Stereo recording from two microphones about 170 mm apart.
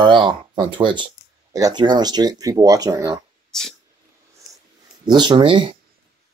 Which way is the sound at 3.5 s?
5° left (ahead or behind).